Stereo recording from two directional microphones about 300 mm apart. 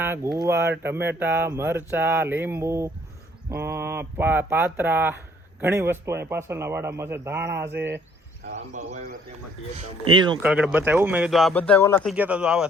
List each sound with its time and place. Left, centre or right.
0.0 s speech: centre
8.5 s a man's voice: right
10.4 s speech: centre